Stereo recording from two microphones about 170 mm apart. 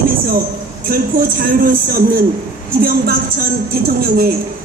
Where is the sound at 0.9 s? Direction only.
60° right (ahead or behind).